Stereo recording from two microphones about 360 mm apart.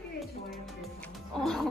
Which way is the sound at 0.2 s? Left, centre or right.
Centre.